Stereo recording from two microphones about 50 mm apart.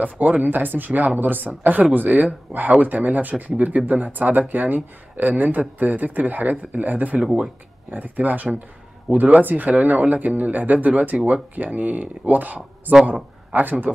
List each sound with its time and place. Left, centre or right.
0.0 s speech: right